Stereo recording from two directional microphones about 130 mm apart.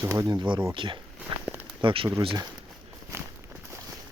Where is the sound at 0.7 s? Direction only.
40° right (ahead or behind).